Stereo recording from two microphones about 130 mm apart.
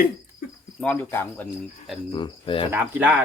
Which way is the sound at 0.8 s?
15° left (ahead or behind).